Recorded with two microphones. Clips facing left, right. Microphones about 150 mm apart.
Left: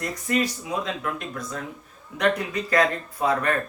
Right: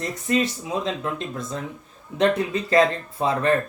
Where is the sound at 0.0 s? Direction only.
25° right (ahead or behind).